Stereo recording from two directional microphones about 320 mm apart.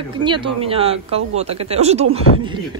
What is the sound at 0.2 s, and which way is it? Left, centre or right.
Speech, centre.